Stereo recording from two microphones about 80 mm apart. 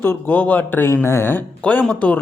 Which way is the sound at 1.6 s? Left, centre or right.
Centre.